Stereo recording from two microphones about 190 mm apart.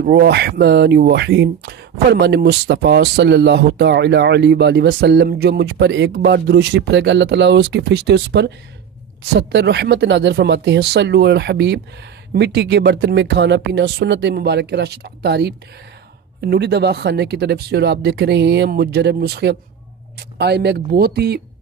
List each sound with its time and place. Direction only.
0.0 s speech: 60° right (ahead or behind)